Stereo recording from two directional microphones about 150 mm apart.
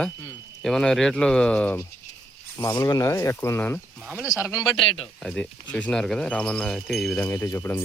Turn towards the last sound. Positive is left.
turn(degrees=15)  # may be behind; listen again after turning